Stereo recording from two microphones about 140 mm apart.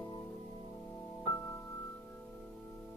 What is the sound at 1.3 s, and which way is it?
Music, 15° left (ahead or behind).